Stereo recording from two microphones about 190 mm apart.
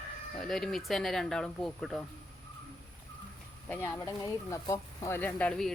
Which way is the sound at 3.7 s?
15° left (ahead or behind).